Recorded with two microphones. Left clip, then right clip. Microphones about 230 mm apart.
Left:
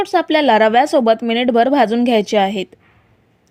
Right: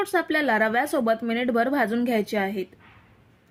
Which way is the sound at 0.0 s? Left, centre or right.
Left.